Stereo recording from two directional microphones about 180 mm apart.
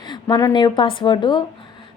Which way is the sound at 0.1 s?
25° left (ahead or behind).